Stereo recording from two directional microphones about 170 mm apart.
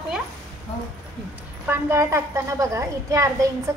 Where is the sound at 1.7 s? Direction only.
15° right (ahead or behind).